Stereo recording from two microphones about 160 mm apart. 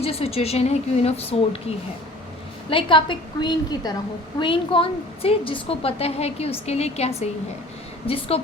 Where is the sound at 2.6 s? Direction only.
30° left (ahead or behind).